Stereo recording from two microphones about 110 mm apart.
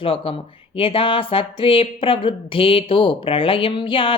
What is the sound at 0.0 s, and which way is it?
A woman's voice, 55° left (ahead or behind).